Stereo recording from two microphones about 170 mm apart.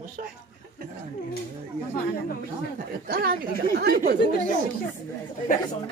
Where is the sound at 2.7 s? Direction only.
60° right (ahead or behind).